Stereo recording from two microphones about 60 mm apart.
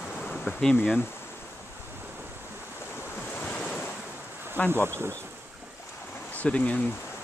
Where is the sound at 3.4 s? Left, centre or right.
Centre.